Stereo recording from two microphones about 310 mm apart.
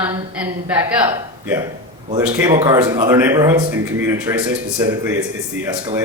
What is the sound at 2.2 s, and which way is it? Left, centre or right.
Speech, centre.